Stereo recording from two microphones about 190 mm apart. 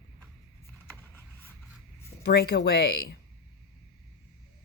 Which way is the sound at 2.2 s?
60° left (ahead or behind).